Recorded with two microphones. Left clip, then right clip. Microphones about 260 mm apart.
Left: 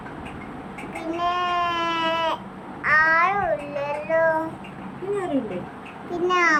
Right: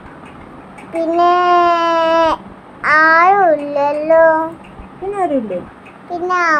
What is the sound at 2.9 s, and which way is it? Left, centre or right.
Child singing, right.